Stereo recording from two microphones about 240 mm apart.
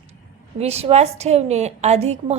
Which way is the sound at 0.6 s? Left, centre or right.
Right.